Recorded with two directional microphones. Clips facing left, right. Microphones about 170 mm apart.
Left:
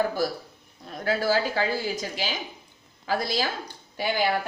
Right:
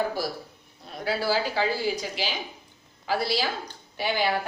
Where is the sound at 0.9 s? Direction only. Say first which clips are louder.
Left 2 dB; 45° left (ahead or behind).